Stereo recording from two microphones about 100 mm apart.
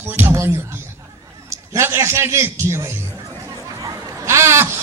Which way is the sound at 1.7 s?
25° right (ahead or behind).